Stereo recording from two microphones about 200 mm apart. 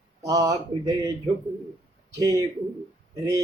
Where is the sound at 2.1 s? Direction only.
20° right (ahead or behind).